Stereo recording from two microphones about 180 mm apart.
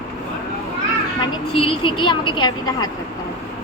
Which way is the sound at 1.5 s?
30° left (ahead or behind).